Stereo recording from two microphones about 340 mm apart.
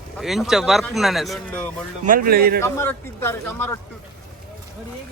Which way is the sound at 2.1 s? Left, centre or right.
Right.